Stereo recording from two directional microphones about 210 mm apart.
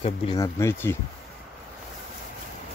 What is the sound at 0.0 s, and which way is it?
Speech, 20° left (ahead or behind).